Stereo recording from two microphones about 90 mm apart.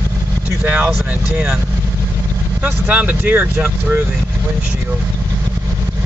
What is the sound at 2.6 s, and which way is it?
Speech, 20° right (ahead or behind).